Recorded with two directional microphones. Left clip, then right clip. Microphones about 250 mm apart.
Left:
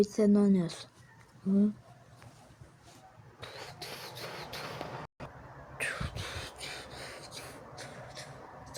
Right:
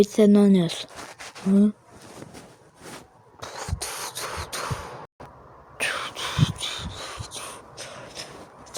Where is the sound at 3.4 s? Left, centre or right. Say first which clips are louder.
Right 10 dB; right.